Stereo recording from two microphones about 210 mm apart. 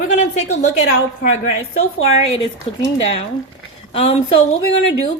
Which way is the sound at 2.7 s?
30° left (ahead or behind).